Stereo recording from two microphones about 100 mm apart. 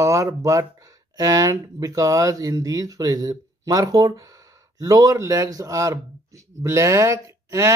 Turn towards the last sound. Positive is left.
turn(degrees=-30)  # may be behind; listen again after turning